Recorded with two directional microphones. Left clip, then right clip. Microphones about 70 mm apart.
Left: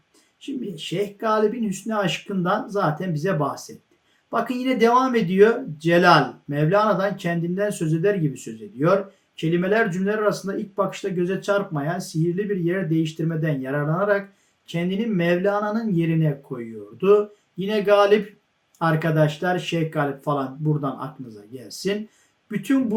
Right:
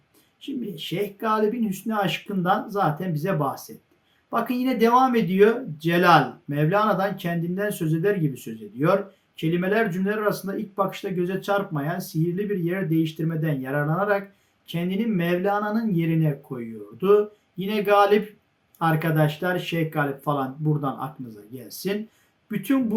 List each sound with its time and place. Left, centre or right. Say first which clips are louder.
0.4 s speech: left 1 dB; right